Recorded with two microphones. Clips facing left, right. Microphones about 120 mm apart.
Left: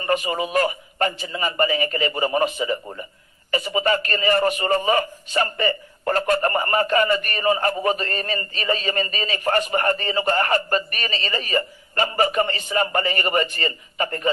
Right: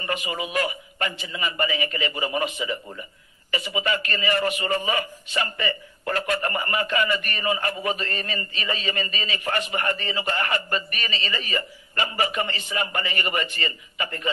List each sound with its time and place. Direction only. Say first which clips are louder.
0.0 s a man's voice: left 6 dB; 40° left (ahead or behind)